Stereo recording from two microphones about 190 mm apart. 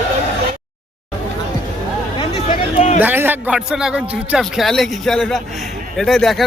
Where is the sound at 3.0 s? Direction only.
10° right (ahead or behind).